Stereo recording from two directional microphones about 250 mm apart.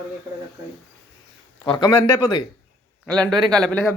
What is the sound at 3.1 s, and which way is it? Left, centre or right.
Speech, centre.